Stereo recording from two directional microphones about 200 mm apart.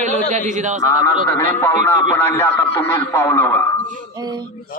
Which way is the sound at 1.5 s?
10° left (ahead or behind).